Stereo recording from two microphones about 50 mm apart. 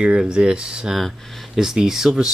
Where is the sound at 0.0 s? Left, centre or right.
Centre.